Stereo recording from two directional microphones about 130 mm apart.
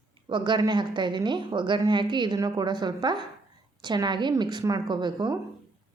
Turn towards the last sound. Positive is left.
turn(degrees=-35)  # may be behind; listen again after turning